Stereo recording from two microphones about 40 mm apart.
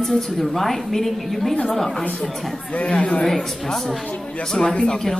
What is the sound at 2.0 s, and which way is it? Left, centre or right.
A woman's voice, left.